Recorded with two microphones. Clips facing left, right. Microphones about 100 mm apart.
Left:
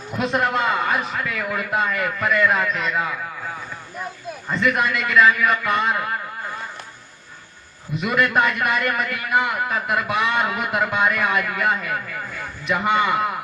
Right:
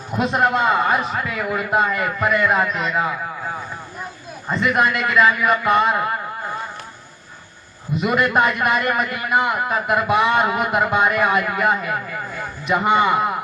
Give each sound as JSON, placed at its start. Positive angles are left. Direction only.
{"t": 0.2, "sound": "a man's voice", "side_deg": -20}
{"t": 4.4, "sound": "a man's voice", "side_deg": -25}
{"t": 8.0, "sound": "a man's voice", "side_deg": -20}